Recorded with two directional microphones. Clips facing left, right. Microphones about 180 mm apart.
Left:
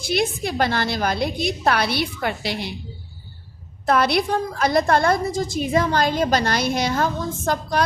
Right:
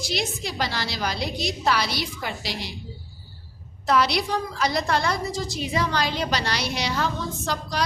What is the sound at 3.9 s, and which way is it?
A woman's voice, 55° left (ahead or behind).